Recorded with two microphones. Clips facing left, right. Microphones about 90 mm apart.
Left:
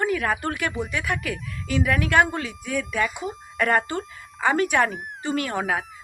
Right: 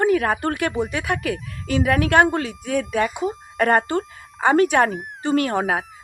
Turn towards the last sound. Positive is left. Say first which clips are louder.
# right 5 dB
turn(degrees=-40)  # may be behind; listen again after turning